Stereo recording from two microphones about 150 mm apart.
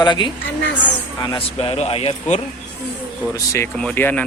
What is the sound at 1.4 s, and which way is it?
Speech, 40° left (ahead or behind).